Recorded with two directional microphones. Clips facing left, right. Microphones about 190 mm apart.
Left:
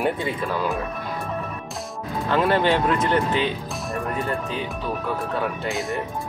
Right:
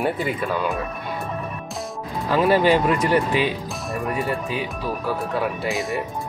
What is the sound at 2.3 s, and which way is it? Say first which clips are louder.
Speech: right 3 dB; 10° right (ahead or behind).